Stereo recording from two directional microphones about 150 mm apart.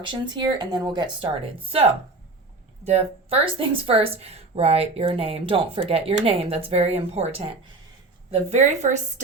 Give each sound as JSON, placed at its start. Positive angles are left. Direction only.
{"t": 0.0, "sound": "a woman's voice", "side_deg": -30}
{"t": 2.8, "sound": "a woman's voice", "side_deg": -45}